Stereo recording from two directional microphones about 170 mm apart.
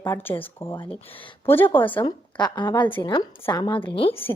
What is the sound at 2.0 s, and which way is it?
A woman's voice, 25° left (ahead or behind).